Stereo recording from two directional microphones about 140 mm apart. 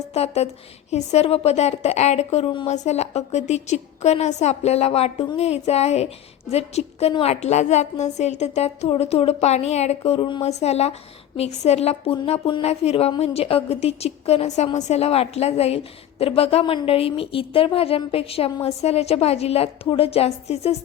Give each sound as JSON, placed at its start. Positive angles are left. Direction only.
{"t": 0.1, "sound": "a woman's voice", "side_deg": 50}
{"t": 10.1, "sound": "speech", "side_deg": 35}
{"t": 10.4, "sound": "a woman's voice", "side_deg": 50}